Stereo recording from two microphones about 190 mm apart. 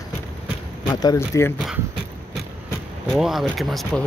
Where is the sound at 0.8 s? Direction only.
20° left (ahead or behind).